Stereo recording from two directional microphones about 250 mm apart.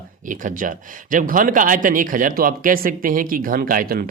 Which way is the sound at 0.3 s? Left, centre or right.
Right.